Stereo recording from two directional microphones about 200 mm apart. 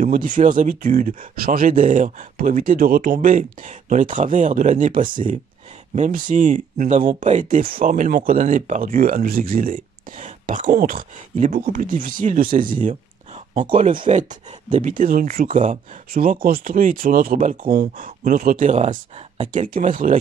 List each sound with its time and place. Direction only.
0.0 s speech: 40° right (ahead or behind)